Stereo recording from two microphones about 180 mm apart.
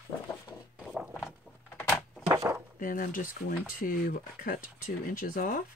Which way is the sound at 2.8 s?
50° left (ahead or behind).